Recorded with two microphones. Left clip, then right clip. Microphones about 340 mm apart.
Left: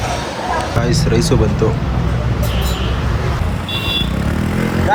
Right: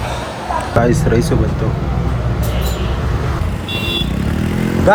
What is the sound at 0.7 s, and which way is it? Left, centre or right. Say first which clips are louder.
Speech: right 3 dB; centre.